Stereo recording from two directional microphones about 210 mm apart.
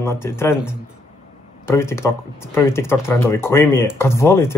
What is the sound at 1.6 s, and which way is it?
Speech, 10° left (ahead or behind).